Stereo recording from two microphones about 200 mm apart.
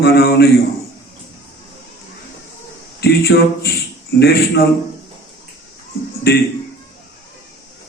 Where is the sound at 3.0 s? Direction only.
50° left (ahead or behind).